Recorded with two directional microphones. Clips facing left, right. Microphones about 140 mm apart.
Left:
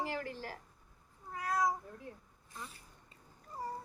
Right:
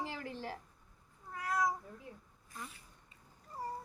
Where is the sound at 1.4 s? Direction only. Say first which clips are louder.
Left 1 dB; 15° left (ahead or behind).